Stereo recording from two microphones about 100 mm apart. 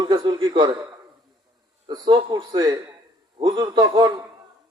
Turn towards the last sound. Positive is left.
turn(degrees=-45)  # may be behind; listen again after turning